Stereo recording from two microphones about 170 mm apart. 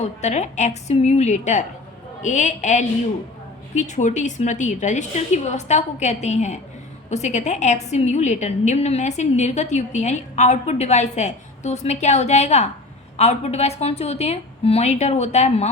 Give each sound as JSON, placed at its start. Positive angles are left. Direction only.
{"t": 0.0, "sound": "a woman's voice", "side_deg": 45}